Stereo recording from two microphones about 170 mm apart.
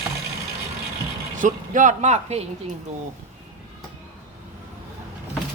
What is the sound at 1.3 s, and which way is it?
Speech, 50° right (ahead or behind).